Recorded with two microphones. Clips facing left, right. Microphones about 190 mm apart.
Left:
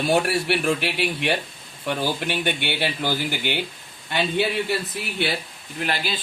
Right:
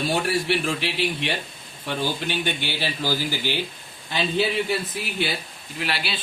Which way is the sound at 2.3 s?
60° left (ahead or behind).